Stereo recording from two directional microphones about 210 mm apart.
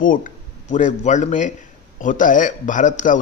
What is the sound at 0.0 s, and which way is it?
A man's voice, 40° left (ahead or behind).